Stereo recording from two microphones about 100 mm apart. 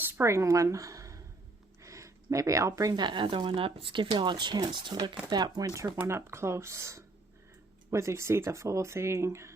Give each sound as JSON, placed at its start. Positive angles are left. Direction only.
{"t": 0.1, "sound": "speech", "side_deg": -30}